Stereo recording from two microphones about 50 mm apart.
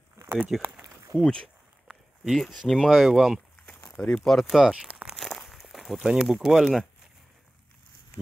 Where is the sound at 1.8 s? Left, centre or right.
Centre.